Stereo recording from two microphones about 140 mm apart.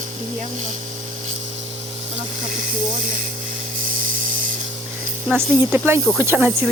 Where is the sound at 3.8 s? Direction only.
80° right.